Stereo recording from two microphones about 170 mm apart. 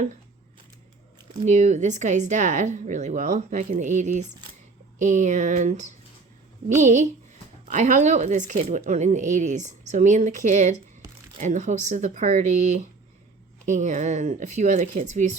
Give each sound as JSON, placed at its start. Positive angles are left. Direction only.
{"t": 1.5, "sound": "speech", "side_deg": -45}